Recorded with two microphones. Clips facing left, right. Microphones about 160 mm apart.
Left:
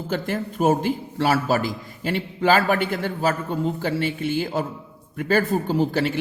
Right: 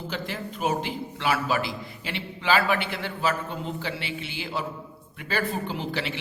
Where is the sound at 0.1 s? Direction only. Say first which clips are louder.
Left 10 dB; 50° left (ahead or behind).